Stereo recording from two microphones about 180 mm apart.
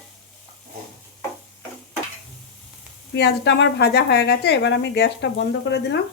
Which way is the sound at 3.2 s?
70° left (ahead or behind).